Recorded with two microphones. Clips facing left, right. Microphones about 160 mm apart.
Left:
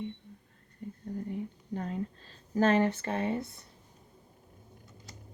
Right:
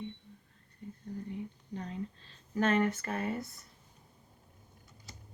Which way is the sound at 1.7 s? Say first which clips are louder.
Left 5 dB; 45° left (ahead or behind).